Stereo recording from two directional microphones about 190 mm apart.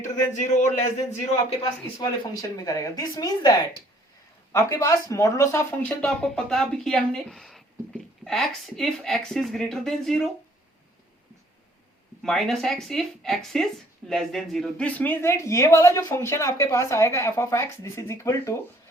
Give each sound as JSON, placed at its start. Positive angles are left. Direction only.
{"t": 0.3, "sound": "a man's voice", "side_deg": 40}
{"t": 1.6, "sound": "a woman's voice", "side_deg": 20}
{"t": 12.2, "sound": "speech", "side_deg": 0}